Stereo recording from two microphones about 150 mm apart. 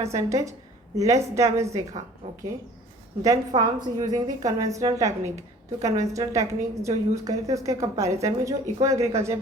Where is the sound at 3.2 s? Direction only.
25° right (ahead or behind).